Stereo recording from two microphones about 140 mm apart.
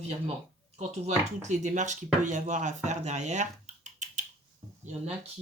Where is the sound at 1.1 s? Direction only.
55° right (ahead or behind).